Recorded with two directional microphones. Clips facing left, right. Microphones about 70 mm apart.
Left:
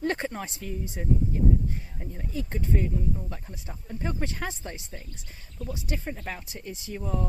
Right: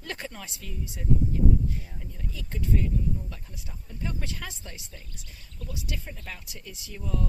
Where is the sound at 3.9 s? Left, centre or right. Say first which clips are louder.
Left 4 dB; left.